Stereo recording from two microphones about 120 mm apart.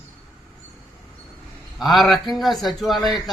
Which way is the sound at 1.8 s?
Centre (ahead or behind).